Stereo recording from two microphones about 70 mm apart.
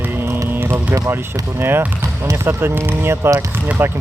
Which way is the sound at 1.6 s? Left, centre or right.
Right.